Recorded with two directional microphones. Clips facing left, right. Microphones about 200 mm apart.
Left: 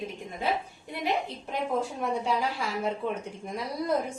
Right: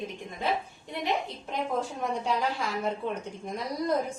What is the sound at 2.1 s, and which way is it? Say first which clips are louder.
A woman's voice: even; 5° left (ahead or behind).